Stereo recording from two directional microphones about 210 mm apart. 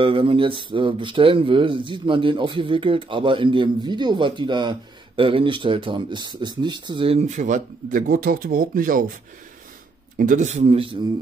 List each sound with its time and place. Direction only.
0.0 s speech: 25° right (ahead or behind); by 9.0 s 40° right (ahead or behind)
10.1 s a man's voice: 40° right (ahead or behind)